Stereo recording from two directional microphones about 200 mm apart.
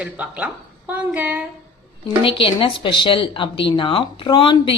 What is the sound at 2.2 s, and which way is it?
Speech, 25° left (ahead or behind).